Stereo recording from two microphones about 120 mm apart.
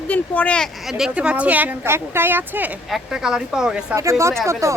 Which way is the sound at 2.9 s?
5° right (ahead or behind).